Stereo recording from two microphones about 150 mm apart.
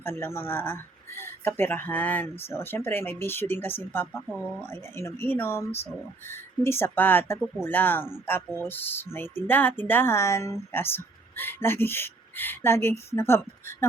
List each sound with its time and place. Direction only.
0.0 s speech: 15° left (ahead or behind)
4.3 s speech: 5° right (ahead or behind)
4.6 s speech: 15° left (ahead or behind)